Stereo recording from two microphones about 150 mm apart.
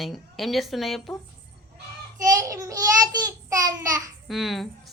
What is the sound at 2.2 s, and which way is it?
A child's voice, 20° right (ahead or behind).